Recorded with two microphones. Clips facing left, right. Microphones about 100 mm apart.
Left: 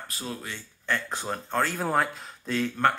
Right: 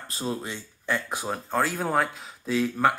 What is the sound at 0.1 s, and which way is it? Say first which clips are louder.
Speech: right 7 dB; 25° right (ahead or behind).